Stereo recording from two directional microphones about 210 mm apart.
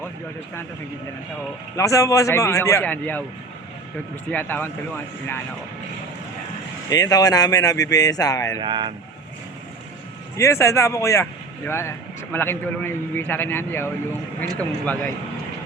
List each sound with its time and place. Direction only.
1.7 s speech: 15° left (ahead or behind)
4.3 s speech: 10° left (ahead or behind)
6.9 s speech: 15° left (ahead or behind)
8.6 s speech: 20° right (ahead or behind)
10.3 s speech: 15° left (ahead or behind)